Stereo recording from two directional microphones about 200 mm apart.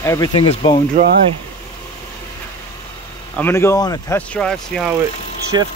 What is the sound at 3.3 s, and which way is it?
Speech, 10° left (ahead or behind).